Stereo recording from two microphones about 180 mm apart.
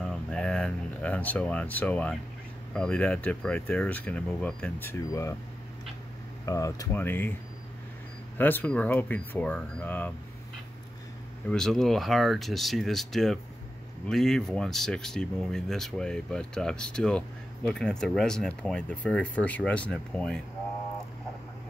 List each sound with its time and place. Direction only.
0.0 s a sound: 5° left (ahead or behind)
2.7 s speech: 5° left (ahead or behind)
6.4 s speech: 20° left (ahead or behind)
8.4 s speech: 10° left (ahead or behind)
11.4 s speech: 5° left (ahead or behind)